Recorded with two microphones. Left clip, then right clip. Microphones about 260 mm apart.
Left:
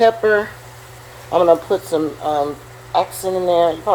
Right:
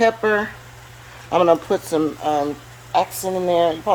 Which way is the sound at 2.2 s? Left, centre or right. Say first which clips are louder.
Left 2 dB; right.